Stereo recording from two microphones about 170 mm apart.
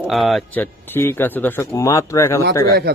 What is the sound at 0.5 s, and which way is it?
Speech, 10° left (ahead or behind).